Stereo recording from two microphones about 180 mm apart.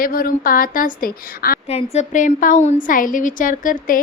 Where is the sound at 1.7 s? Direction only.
35° left (ahead or behind).